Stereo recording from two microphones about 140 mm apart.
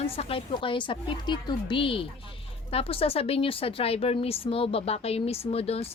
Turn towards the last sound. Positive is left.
turn(degrees=45)  # may be behind; listen again after turning